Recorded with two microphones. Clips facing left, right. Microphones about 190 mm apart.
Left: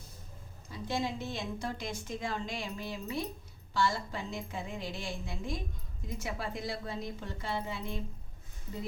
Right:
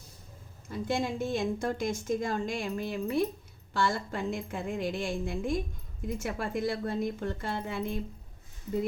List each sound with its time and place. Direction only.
0.7 s a woman's voice: 50° right (ahead or behind)